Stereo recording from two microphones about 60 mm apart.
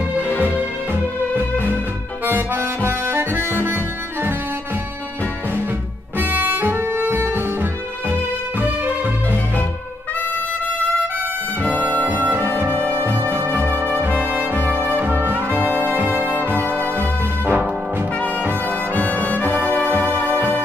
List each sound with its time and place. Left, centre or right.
0.3 s music: left
2.2 s harmonica: right
6.1 s music: right
11.6 s music: right
12.4 s music: right
13.3 s brass instrument: right
18.7 s music: left